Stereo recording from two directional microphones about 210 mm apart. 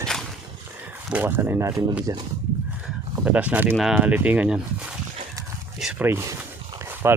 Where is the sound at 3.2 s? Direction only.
5° right (ahead or behind).